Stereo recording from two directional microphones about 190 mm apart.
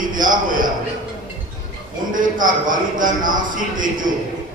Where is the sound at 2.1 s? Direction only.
45° right (ahead or behind).